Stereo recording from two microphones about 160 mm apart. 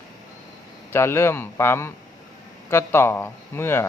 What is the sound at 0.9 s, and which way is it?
A man's voice, 15° left (ahead or behind).